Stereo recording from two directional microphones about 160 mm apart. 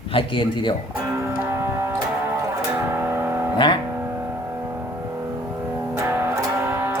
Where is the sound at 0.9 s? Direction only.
10° right (ahead or behind).